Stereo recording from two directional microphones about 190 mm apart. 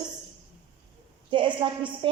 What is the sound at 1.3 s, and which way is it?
Speech, 25° right (ahead or behind).